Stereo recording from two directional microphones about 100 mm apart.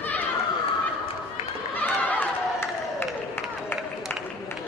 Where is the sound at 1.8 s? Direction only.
15° left (ahead or behind).